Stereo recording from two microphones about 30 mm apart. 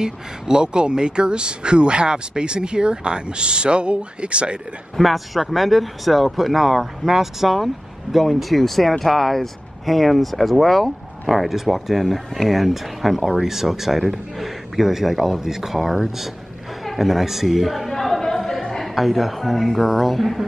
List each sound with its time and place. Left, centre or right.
0.0 s speech: right
4.9 s speech: centre
17.8 s chatter: centre
18.5 s a sound: centre
18.9 s speech: centre